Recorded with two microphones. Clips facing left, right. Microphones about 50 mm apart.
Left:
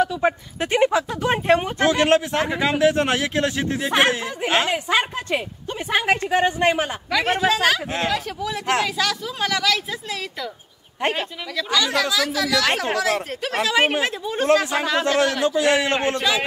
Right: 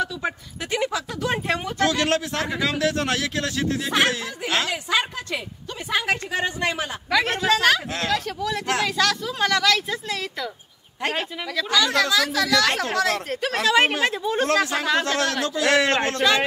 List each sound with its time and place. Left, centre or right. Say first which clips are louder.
0.0 s speech: left 6 dB; left
7.1 s speech: even; centre
14.5 s speech: left 5 dB; centre
16.2 s speech: right 2 dB; centre